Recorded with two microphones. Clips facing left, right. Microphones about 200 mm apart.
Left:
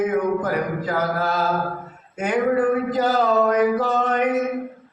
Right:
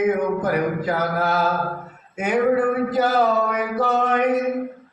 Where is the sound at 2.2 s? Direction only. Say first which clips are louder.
Right 1 dB; 10° right (ahead or behind).